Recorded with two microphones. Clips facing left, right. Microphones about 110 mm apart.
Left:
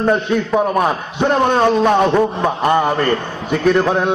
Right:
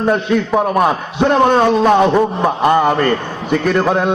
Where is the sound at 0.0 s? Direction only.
5° right (ahead or behind).